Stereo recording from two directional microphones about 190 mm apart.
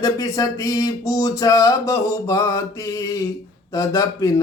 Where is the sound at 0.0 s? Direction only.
20° left (ahead or behind).